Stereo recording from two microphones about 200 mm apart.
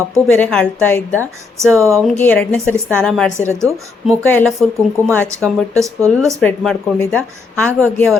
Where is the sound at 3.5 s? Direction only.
15° right (ahead or behind).